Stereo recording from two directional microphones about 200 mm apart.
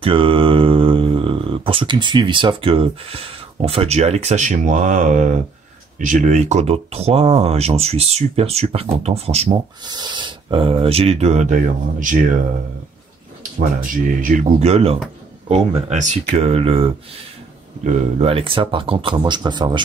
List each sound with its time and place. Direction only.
0.0 s speech: 25° right (ahead or behind)
14.2 s speech: 40° right (ahead or behind); by 19.8 s 20° right (ahead or behind)